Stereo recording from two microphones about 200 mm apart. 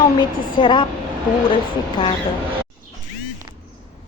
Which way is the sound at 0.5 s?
25° left (ahead or behind).